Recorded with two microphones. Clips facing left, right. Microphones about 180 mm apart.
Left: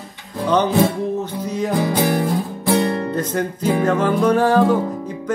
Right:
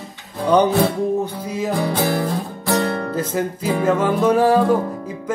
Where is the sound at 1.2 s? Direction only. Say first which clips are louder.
Left 1 dB; 5° right (ahead or behind).